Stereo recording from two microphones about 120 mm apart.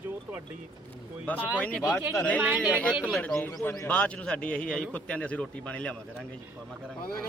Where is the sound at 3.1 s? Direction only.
5° left (ahead or behind).